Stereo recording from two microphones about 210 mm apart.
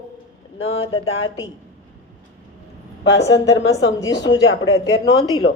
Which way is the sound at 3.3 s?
65° left (ahead or behind).